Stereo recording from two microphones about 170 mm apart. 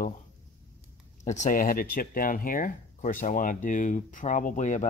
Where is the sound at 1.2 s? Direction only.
45° left (ahead or behind).